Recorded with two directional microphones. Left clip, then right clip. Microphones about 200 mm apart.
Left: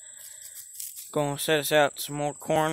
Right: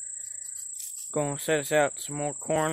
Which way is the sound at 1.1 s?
15° left (ahead or behind).